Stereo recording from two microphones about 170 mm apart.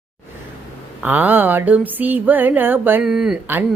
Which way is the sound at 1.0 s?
10° right (ahead or behind).